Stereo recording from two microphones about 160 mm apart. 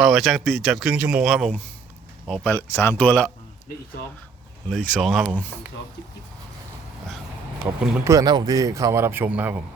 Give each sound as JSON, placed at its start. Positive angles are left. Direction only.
{"t": 0.0, "sound": "speech", "side_deg": 0}
{"t": 4.7, "sound": "speech", "side_deg": 5}
{"t": 8.0, "sound": "speech", "side_deg": -25}